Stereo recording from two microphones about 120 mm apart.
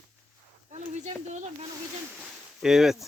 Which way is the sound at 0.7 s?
70° right (ahead or behind).